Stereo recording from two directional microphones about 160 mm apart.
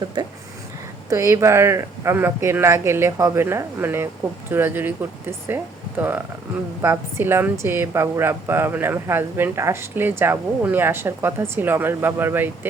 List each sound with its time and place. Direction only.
1.1 s a woman's voice: 15° right (ahead or behind)